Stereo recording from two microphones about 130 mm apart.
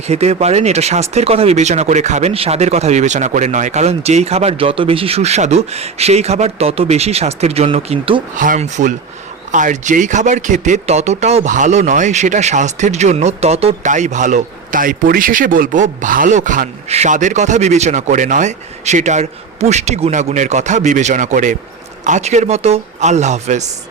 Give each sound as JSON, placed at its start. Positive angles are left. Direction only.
{"t": 0.1, "sound": "speech", "side_deg": -55}
{"t": 8.4, "sound": "speech", "side_deg": -80}
{"t": 13.8, "sound": "a man's voice", "side_deg": -70}
{"t": 16.9, "sound": "speech", "side_deg": -65}
{"t": 22.0, "sound": "speech", "side_deg": -65}